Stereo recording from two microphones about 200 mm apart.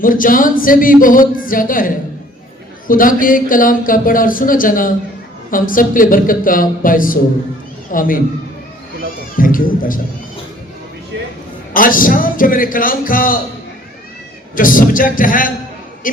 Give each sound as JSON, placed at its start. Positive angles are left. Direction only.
{"t": 0.0, "sound": "speech", "side_deg": 45}
{"t": 9.4, "sound": "speech", "side_deg": 45}
{"t": 11.7, "sound": "speech", "side_deg": 45}
{"t": 14.5, "sound": "speech", "side_deg": 45}